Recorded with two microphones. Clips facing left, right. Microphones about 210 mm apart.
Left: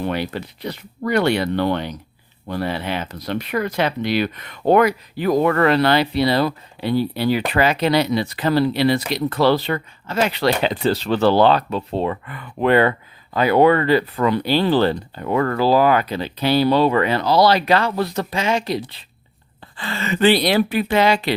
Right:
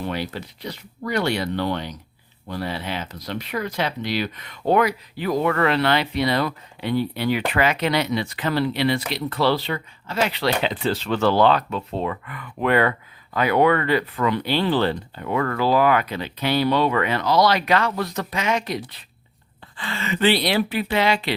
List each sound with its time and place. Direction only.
0.0 s speech: 60° left (ahead or behind); by 19.0 s 30° left (ahead or behind)
19.7 s speech: 40° left (ahead or behind)